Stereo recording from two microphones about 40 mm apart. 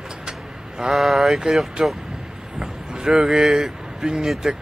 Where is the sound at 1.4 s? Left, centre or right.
Centre.